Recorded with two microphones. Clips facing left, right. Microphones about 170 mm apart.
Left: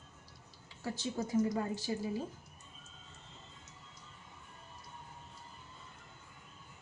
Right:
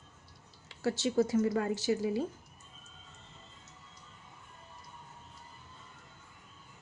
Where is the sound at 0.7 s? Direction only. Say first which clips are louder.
Right 7 dB; 80° right.